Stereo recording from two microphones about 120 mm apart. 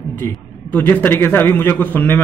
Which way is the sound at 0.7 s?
15° left (ahead or behind).